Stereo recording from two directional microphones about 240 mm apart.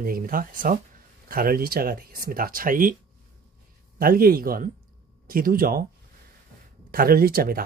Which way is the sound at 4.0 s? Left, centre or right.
Right.